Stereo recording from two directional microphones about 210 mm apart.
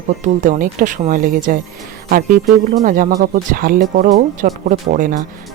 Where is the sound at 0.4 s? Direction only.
40° right (ahead or behind).